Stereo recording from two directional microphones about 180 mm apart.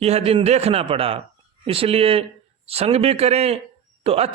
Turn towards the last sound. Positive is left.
turn(degrees=-35)  # may be behind; listen again after turning